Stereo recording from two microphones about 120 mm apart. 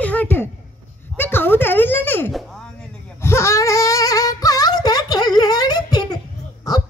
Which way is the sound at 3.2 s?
20° left (ahead or behind).